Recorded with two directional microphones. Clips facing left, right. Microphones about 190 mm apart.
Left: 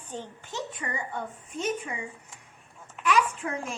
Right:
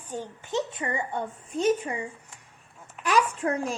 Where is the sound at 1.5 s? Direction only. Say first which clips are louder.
Right 7 dB; 35° right (ahead or behind).